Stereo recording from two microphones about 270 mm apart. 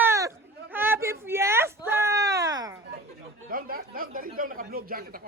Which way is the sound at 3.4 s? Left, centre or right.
Right.